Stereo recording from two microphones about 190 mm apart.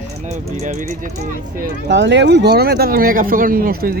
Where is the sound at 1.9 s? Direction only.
65° right (ahead or behind).